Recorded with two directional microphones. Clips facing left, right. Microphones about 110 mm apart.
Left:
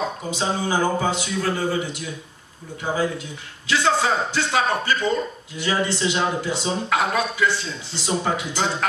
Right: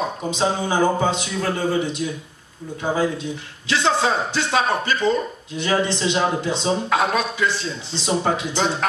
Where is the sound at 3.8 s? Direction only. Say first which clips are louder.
Right 1 dB; 20° right (ahead or behind).